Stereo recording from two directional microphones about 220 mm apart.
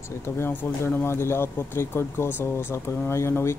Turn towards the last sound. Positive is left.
turn(degrees=10)  # may be behind; listen again after turning